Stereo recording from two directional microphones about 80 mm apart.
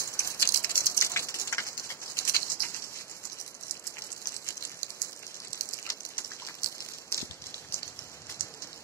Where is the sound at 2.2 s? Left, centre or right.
Left.